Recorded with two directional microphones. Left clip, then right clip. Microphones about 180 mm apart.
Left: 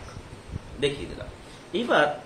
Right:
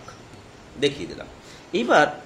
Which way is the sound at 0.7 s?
45° right (ahead or behind).